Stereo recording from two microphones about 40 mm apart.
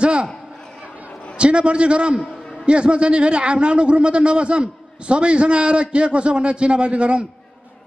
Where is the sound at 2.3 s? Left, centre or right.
Centre.